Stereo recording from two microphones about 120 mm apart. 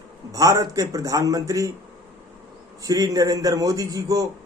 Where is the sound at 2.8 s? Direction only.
30° right (ahead or behind).